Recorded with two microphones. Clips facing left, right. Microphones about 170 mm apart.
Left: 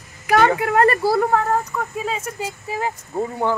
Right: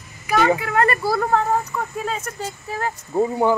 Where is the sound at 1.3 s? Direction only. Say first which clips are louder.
Even; 5° left (ahead or behind).